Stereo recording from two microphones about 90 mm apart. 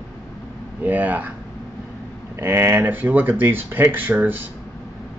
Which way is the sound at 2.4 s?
25° right (ahead or behind).